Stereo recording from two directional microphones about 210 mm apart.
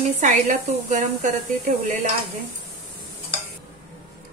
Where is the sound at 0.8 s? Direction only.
35° right (ahead or behind).